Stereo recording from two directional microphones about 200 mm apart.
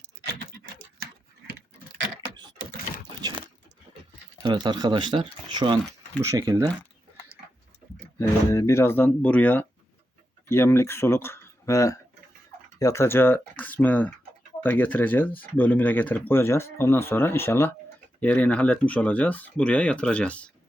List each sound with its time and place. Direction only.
4.4 s speech: 20° right (ahead or behind)
8.2 s speech: 15° left (ahead or behind)